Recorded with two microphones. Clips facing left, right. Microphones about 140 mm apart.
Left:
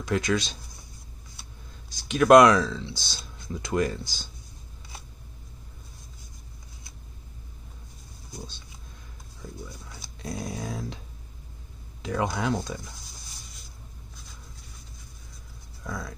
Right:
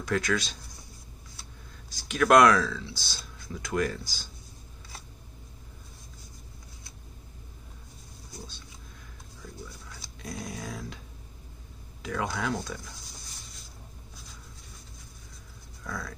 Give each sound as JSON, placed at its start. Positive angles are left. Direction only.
{"t": 0.0, "sound": "speech", "side_deg": 20}
{"t": 2.0, "sound": "speech", "side_deg": 20}
{"t": 10.2, "sound": "dog", "side_deg": 25}
{"t": 12.0, "sound": "speech", "side_deg": 25}
{"t": 15.8, "sound": "speech", "side_deg": 20}